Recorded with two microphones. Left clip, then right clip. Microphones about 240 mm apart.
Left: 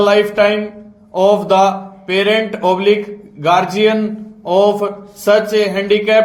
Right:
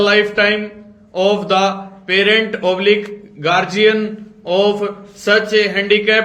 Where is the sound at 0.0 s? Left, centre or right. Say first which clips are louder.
Left 2 dB; left.